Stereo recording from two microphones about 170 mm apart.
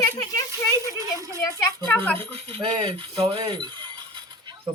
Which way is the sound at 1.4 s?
20° left (ahead or behind).